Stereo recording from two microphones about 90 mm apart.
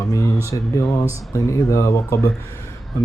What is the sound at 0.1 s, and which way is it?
Speech, 35° left (ahead or behind).